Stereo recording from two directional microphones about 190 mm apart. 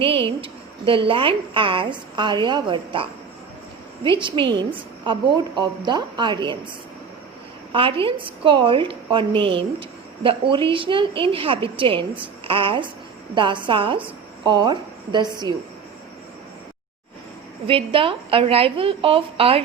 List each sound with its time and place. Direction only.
0.0 s a woman's voice: 30° right (ahead or behind)
7.7 s a woman's voice: 30° right (ahead or behind)
17.7 s a woman's voice: 30° right (ahead or behind)